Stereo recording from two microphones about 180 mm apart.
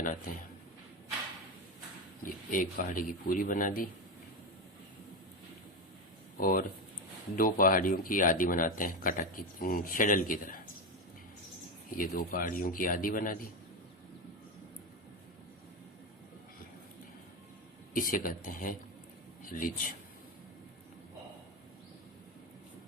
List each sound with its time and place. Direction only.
2.2 s speech: 50° left (ahead or behind)
6.4 s speech: 50° left (ahead or behind)
11.9 s speech: 50° left (ahead or behind)
17.9 s speech: 50° left (ahead or behind)